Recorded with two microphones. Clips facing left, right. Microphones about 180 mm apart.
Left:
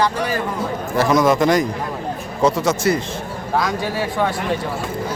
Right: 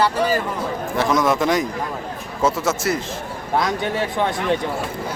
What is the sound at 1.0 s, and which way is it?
A man's voice, centre (ahead or behind).